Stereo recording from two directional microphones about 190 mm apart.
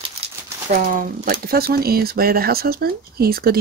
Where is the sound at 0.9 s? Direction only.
50° right (ahead or behind).